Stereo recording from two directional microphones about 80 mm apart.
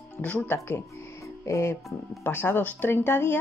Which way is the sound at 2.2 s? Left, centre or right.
Left.